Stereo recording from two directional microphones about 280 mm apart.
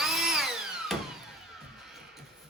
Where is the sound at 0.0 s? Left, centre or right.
Centre.